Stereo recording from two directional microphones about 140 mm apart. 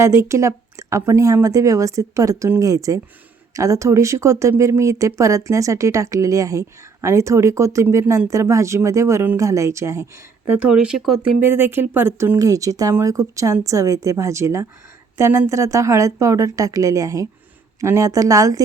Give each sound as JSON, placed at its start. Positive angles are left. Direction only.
{"t": 0.0, "sound": "speech", "side_deg": -20}
{"t": 10.6, "sound": "speech", "side_deg": -5}
{"t": 11.3, "sound": "speech", "side_deg": -15}